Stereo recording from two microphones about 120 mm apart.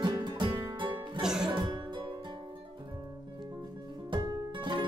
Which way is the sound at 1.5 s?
40° right (ahead or behind).